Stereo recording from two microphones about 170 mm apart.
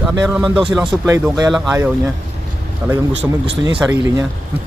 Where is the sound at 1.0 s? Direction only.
15° right (ahead or behind).